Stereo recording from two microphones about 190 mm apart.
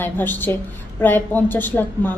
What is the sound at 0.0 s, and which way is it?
A woman's voice, 10° left (ahead or behind).